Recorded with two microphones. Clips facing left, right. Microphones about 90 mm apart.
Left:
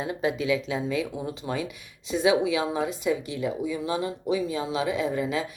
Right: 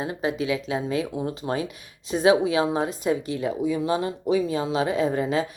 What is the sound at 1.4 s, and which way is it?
Speech, 10° right (ahead or behind).